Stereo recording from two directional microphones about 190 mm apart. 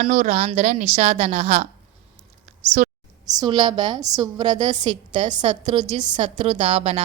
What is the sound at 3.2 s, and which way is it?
A woman's voice, 20° right (ahead or behind).